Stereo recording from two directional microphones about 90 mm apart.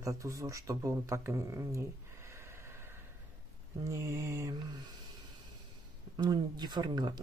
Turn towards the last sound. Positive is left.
turn(degrees=-50)  # may be behind; listen again after turning